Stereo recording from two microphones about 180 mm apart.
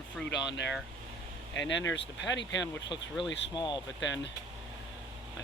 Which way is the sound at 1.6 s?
90° left.